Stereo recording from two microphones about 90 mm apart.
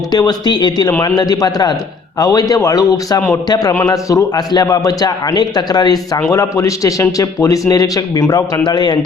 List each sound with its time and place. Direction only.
0.1 s a man's voice: 50° left (ahead or behind)
6.1 s a man's voice: 35° left (ahead or behind); by 9.0 s 55° left (ahead or behind)